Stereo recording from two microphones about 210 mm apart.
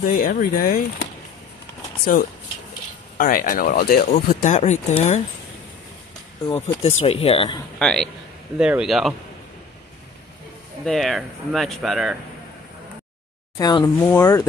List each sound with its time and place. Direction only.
0.0 s speech: 40° left (ahead or behind)
2.1 s speech: 40° left (ahead or behind)
6.4 s speech: 25° left (ahead or behind)
7.8 s speech: 5° left (ahead or behind)
10.9 s speech: centre (ahead or behind)
13.6 s speech: 20° left (ahead or behind)